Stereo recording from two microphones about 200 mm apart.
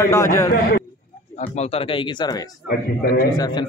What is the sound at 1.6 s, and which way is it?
Speech, 30° left (ahead or behind).